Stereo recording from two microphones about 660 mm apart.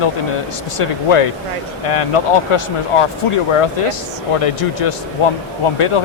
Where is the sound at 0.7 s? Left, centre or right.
Left.